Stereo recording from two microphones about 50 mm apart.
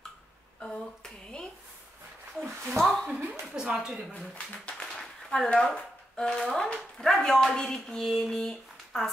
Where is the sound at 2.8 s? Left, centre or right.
Centre.